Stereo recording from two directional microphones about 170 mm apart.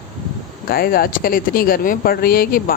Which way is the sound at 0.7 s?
60° left (ahead or behind).